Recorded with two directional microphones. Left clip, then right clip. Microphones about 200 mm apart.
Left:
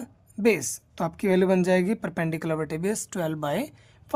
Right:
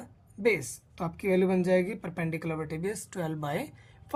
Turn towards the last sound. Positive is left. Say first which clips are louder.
# left 5 dB
turn(degrees=35)  # may be behind; listen again after turning